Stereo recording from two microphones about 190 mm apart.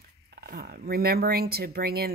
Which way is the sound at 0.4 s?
50° right (ahead or behind).